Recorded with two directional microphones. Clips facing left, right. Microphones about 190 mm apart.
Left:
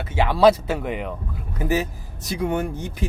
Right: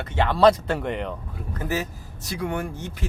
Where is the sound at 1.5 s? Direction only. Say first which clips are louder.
Left 5 dB; 15° left (ahead or behind).